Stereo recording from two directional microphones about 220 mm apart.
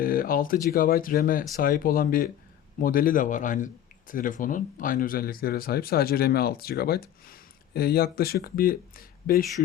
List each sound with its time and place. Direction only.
0.0 s speech: 40° left (ahead or behind)